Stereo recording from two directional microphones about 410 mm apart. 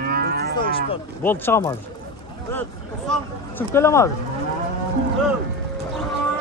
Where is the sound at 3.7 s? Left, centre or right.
Centre.